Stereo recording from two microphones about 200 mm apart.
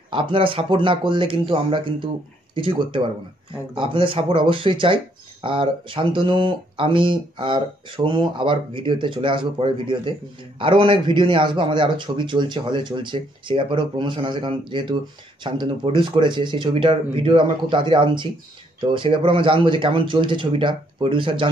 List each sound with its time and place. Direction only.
0.1 s speech: 25° right (ahead or behind)